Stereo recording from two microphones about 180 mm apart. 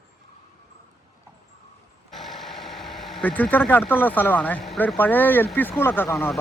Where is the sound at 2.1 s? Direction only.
Centre (ahead or behind).